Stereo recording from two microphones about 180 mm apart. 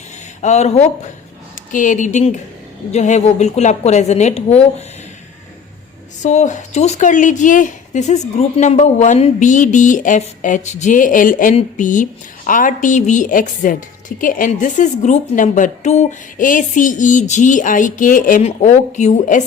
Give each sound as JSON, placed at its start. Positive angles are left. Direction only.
{"t": 0.4, "sound": "a woman's voice", "side_deg": 40}
{"t": 6.2, "sound": "speech", "side_deg": 40}